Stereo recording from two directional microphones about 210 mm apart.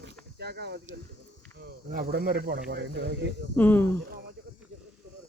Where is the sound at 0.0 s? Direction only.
50° right (ahead or behind).